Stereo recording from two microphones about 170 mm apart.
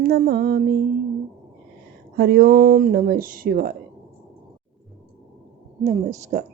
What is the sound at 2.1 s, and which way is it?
Speech, 65° right (ahead or behind).